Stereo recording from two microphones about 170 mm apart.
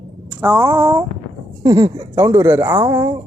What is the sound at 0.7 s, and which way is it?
Speech, 30° right (ahead or behind).